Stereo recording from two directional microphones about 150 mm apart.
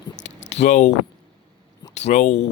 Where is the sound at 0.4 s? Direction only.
50° left (ahead or behind).